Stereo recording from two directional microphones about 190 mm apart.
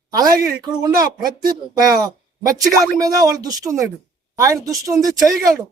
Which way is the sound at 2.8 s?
20° right (ahead or behind).